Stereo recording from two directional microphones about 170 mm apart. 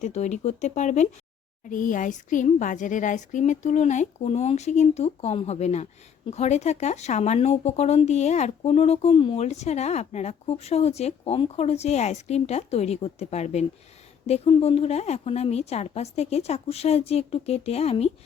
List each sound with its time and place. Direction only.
0.0 s a woman's voice: 45° left (ahead or behind)